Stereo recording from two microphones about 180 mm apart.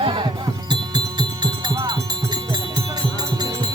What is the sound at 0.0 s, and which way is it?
Music, 25° right (ahead or behind).